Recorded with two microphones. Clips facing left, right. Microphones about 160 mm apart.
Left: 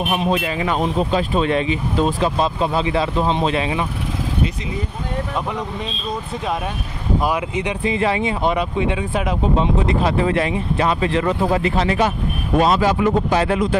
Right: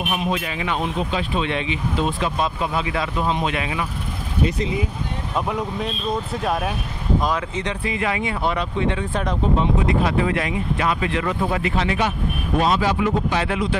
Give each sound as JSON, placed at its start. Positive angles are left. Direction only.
{"t": 0.0, "sound": "speech", "side_deg": 35}
{"t": 7.2, "sound": "speech", "side_deg": 10}
{"t": 7.9, "sound": "speech", "side_deg": 30}
{"t": 9.6, "sound": "speech", "side_deg": 30}